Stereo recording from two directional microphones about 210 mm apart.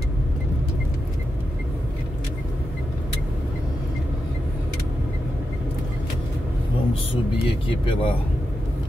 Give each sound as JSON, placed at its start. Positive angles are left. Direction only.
{"t": 7.4, "sound": "speech", "side_deg": 25}